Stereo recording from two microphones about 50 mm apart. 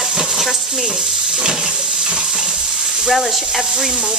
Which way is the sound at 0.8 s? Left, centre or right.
Centre.